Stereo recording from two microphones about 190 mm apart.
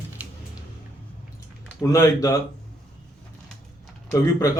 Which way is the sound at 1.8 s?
15° left (ahead or behind).